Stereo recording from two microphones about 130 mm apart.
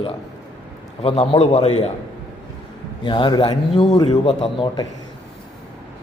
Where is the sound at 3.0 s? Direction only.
35° left (ahead or behind).